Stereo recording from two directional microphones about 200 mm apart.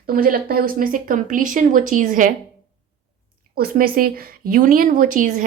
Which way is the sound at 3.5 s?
50° right (ahead or behind).